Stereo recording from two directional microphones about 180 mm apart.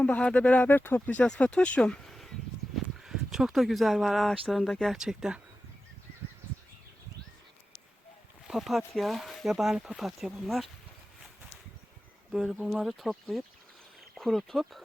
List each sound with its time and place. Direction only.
0.0 s speech: 5° left (ahead or behind)
8.4 s speech: centre (ahead or behind)
12.3 s speech: 5° right (ahead or behind)